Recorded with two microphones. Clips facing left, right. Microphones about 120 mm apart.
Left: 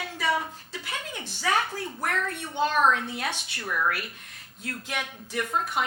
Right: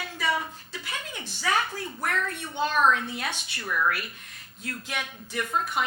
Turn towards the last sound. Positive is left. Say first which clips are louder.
# even
turn(degrees=40)  # may be behind; listen again after turning